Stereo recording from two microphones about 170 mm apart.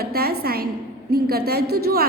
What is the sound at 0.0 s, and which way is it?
A woman's voice, 65° right (ahead or behind).